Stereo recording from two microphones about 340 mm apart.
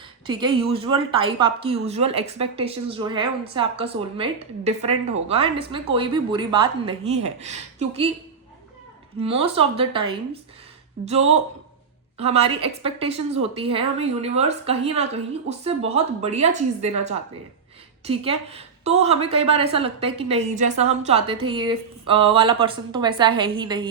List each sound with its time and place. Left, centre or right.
0.3 s speech: centre
9.2 s speech: centre